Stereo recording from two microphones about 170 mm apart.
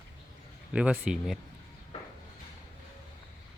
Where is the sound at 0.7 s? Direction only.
5° right (ahead or behind).